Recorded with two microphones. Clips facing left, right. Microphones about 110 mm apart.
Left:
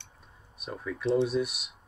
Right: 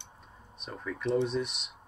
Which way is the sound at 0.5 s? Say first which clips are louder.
Left 2 dB; 5° left (ahead or behind).